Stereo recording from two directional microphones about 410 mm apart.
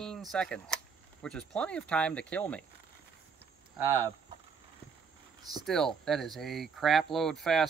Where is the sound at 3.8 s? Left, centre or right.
Centre.